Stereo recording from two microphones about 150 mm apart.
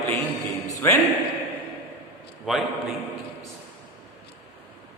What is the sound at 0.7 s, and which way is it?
Music, 20° left (ahead or behind).